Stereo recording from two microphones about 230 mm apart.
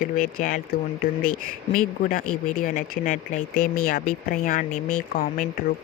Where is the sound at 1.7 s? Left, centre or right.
Left.